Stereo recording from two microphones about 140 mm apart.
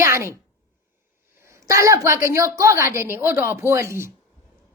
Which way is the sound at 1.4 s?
20° right (ahead or behind).